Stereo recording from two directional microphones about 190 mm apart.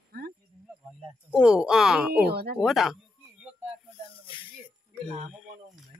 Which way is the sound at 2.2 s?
55° right (ahead or behind).